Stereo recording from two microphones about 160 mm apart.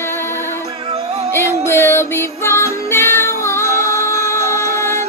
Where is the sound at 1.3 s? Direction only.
15° left (ahead or behind).